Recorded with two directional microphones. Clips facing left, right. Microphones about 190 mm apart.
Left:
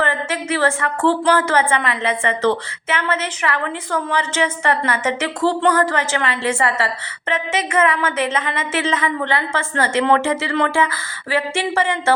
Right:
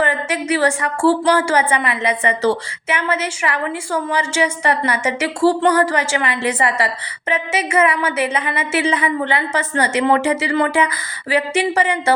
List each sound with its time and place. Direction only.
0.0 s a woman's voice: 15° right (ahead or behind)